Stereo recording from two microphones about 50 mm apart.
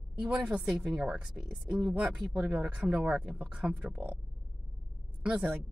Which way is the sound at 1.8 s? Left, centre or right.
Right.